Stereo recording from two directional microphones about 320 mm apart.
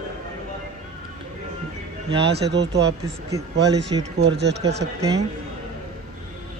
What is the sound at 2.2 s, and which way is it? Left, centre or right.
Speech, right.